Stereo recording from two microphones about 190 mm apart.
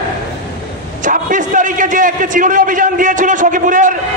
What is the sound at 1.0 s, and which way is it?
A man's voice, 45° right (ahead or behind).